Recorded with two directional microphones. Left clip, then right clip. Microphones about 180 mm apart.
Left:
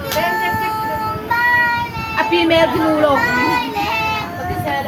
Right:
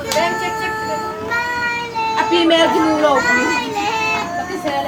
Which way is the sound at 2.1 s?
5° right (ahead or behind).